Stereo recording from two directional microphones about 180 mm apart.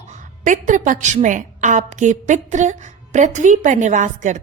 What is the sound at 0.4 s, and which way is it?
A woman's voice, 45° right (ahead or behind).